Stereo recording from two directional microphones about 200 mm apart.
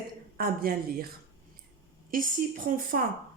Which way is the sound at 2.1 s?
40° right (ahead or behind).